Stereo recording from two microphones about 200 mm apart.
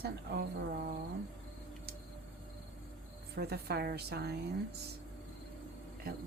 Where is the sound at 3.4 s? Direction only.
55° right (ahead or behind).